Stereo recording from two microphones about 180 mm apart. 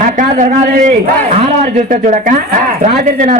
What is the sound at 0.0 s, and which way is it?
A man's voice, 45° right (ahead or behind).